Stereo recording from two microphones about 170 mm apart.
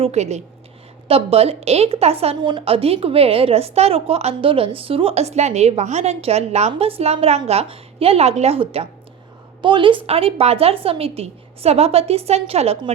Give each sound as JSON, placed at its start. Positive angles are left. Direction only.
{"t": 0.0, "sound": "a woman's voice", "side_deg": -40}